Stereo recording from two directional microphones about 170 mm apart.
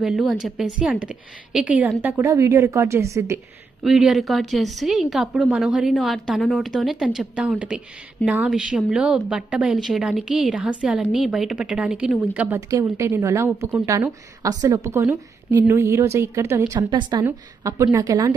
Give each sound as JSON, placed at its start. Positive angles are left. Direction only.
{"t": 0.0, "sound": "a woman's voice", "side_deg": 0}
{"t": 3.8, "sound": "a woman's voice", "side_deg": 0}
{"t": 12.5, "sound": "a woman's voice", "side_deg": -20}